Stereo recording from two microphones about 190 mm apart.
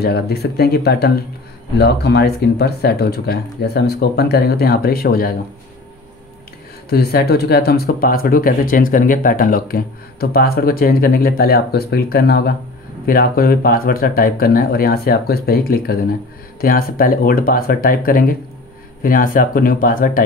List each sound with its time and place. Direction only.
0.0 s speech: 55° left (ahead or behind)
6.9 s speech: 55° left (ahead or behind)